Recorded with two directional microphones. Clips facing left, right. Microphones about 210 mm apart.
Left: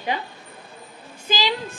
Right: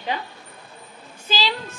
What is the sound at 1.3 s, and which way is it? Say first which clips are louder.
Speech: left 1 dB; 15° left (ahead or behind).